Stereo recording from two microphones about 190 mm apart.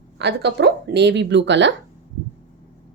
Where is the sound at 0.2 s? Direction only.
65° right (ahead or behind).